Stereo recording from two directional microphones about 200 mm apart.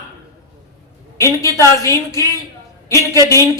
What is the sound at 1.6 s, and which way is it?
Speech, 15° left (ahead or behind).